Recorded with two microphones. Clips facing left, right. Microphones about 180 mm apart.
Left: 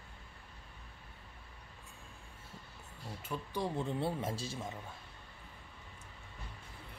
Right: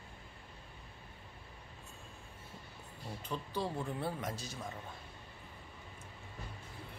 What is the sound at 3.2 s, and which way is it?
A man's voice, 10° left (ahead or behind).